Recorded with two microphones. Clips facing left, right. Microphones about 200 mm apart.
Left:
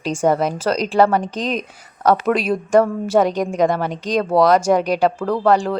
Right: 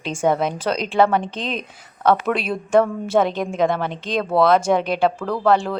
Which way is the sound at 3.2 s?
40° left (ahead or behind).